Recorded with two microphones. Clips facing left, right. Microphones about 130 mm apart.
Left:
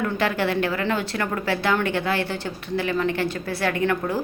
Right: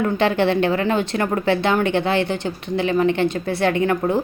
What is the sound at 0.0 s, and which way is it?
Speech, 25° right (ahead or behind).